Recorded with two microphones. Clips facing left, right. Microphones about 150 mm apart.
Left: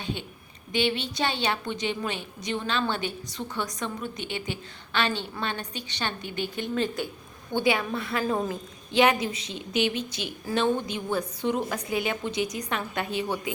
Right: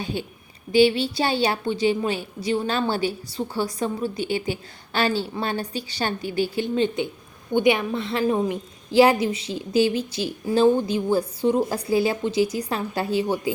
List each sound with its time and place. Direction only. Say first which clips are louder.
0.0 s a woman's voice: right 5 dB; 40° right (ahead or behind)
7.5 s a woman's voice: right 5 dB; 20° right (ahead or behind)